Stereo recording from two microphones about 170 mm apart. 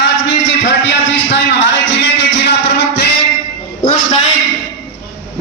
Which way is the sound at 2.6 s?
90° left.